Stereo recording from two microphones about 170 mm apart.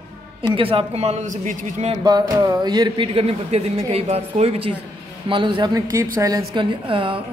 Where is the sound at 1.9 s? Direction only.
25° right (ahead or behind).